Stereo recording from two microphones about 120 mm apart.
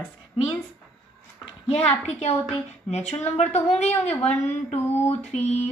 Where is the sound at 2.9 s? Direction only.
70° left (ahead or behind).